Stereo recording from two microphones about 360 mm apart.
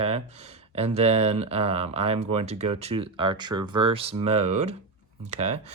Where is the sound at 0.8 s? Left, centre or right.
Centre.